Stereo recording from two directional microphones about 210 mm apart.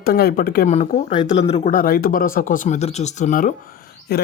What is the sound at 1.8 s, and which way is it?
Speech, 45° left (ahead or behind).